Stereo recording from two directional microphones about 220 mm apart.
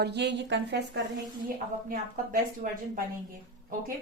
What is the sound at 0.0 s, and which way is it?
Speech, 50° right (ahead or behind).